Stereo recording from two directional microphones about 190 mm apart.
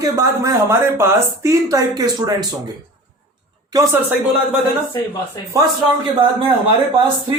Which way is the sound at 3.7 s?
15° right (ahead or behind).